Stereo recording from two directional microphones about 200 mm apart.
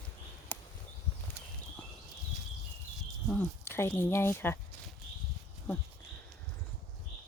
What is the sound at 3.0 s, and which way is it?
Speech, 5° left (ahead or behind).